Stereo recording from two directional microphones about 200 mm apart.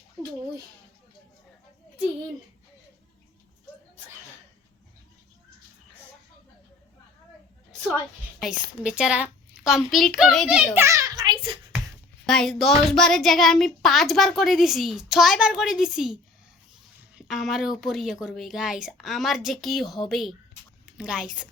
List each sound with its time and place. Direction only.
7.9 s a woman's voice: 5° right (ahead or behind)
10.8 s a sound: 15° right (ahead or behind)
12.2 s a child's voice: centre (ahead or behind)
17.2 s a child's voice: centre (ahead or behind)